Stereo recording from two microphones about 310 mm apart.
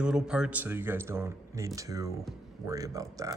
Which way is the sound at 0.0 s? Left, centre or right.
Centre.